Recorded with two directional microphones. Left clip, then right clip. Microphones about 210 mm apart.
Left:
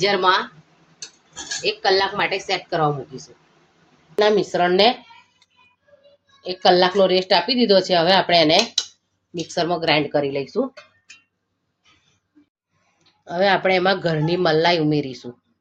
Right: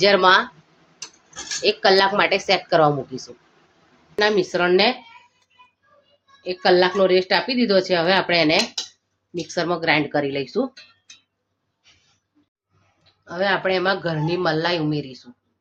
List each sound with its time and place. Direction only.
0.0 s a woman's voice: 20° right (ahead or behind)
1.6 s a woman's voice: 20° right (ahead or behind)
4.1 s a woman's voice: centre (ahead or behind)
6.4 s a woman's voice: 5° left (ahead or behind)
13.2 s a man's voice: 25° left (ahead or behind)